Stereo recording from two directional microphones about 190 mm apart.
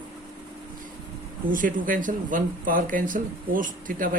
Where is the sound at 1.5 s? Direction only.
45° right (ahead or behind).